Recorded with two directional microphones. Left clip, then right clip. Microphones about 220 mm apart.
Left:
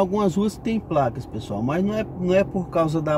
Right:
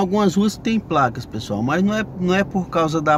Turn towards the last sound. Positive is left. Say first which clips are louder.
# right 4 dB
turn(degrees=-10)  # may be behind; listen again after turning